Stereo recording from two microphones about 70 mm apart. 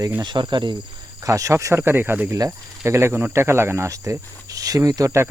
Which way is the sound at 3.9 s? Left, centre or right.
Right.